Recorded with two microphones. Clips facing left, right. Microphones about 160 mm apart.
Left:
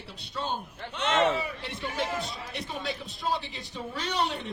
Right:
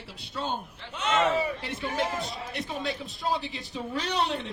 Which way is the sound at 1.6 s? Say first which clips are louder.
Right 2 dB; centre (ahead or behind).